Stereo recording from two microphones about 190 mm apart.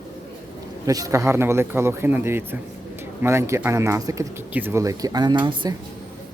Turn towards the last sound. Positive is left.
turn(degrees=-20)  # may be behind; listen again after turning